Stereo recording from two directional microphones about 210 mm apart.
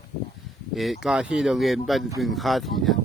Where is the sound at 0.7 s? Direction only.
Centre (ahead or behind).